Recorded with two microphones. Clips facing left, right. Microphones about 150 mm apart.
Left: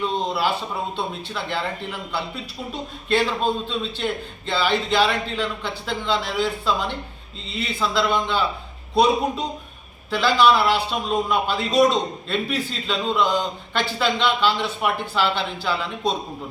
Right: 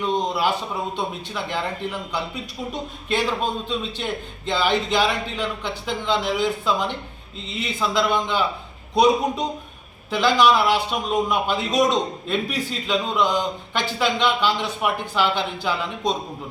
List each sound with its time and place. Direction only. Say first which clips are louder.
0.0 s a man's voice: right 1 dB; 15° right (ahead or behind)
10.1 s a man's voice: even; 15° right (ahead or behind)